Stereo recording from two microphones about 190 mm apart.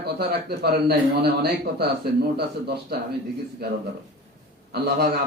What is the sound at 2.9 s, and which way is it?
Speech, 55° right (ahead or behind).